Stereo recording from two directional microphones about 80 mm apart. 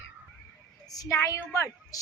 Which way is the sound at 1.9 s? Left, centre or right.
Left.